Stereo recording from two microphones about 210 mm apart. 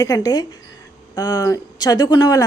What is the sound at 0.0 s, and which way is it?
A woman's voice, 15° left (ahead or behind).